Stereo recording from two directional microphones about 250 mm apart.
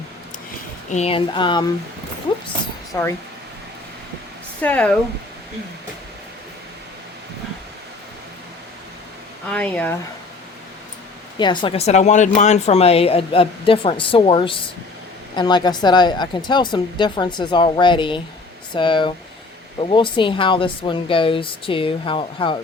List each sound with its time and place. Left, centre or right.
0.9 s speech: left
2.9 s speech: centre
4.6 s speech: centre
9.5 s speech: centre
11.3 s speech: centre